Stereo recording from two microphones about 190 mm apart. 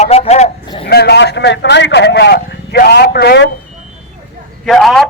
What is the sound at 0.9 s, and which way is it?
Speech, 60° left (ahead or behind).